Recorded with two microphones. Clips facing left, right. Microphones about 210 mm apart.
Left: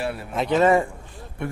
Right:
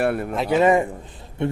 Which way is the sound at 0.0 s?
55° right (ahead or behind).